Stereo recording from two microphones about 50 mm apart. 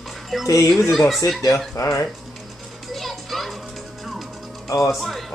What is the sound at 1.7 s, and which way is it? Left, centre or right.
Speech, left.